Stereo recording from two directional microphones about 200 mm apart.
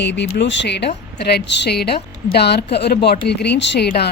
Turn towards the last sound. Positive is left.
turn(degrees=55)  # may be behind; listen again after turning